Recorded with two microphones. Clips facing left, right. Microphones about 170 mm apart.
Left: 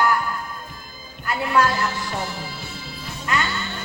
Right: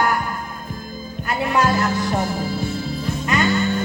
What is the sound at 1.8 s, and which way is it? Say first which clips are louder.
Music: right 6 dB; 50° right (ahead or behind).